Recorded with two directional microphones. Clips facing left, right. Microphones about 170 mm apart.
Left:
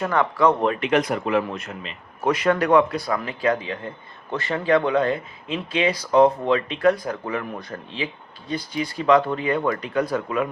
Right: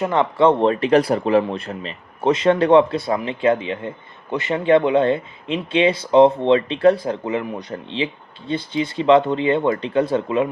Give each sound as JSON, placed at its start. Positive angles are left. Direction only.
{"t": 0.0, "sound": "speech", "side_deg": -20}